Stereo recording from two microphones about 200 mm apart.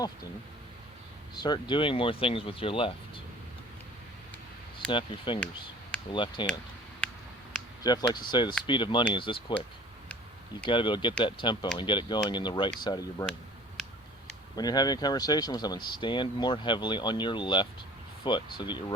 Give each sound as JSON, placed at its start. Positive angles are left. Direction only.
{"t": 1.4, "sound": "speech", "side_deg": 20}
{"t": 4.9, "sound": "speech", "side_deg": 25}
{"t": 7.9, "sound": "speech", "side_deg": 20}
{"t": 10.7, "sound": "speech", "side_deg": 25}
{"t": 14.5, "sound": "speech", "side_deg": 20}